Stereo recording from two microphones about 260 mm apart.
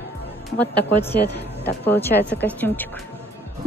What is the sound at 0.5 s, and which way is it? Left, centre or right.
A woman's voice, centre.